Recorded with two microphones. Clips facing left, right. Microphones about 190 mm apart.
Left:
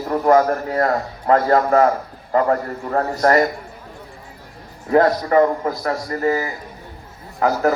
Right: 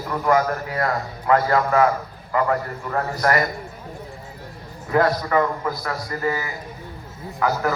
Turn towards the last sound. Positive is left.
turn(degrees=35)  # may be behind; listen again after turning